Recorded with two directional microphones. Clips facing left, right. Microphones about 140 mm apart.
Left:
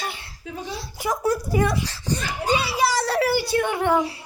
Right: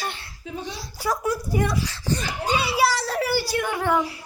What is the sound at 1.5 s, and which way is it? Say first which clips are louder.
Speech: left 2 dB; 90° left.